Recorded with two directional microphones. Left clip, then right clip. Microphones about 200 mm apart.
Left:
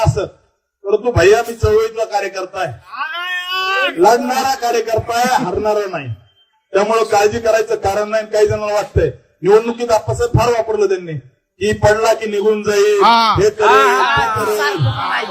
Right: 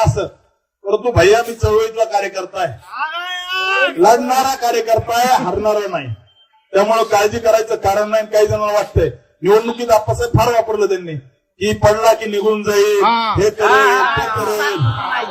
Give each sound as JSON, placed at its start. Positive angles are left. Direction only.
{"t": 0.0, "sound": "a man's voice", "side_deg": -15}
{"t": 2.9, "sound": "a sound", "side_deg": 10}
{"t": 3.9, "sound": "a man's voice", "side_deg": -15}
{"t": 13.0, "sound": "speech", "side_deg": 50}
{"t": 13.7, "sound": "speech", "side_deg": 40}
{"t": 14.0, "sound": "speech", "side_deg": 55}